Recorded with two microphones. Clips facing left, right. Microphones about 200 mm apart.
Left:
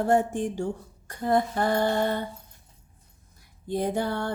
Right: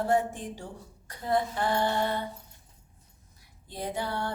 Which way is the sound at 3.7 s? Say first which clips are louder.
Left 7 dB; 50° left (ahead or behind).